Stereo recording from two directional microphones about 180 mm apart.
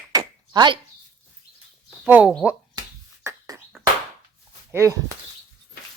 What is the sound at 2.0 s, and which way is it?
Speech, 10° right (ahead or behind).